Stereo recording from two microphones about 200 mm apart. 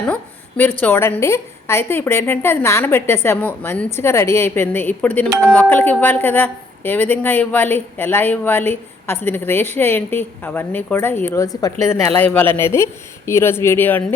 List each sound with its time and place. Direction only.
0.1 s a woman's voice: 10° left (ahead or behind)